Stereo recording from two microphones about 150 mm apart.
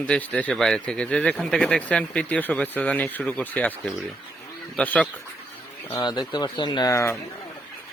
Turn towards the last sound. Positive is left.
turn(degrees=20)  # may be behind; listen again after turning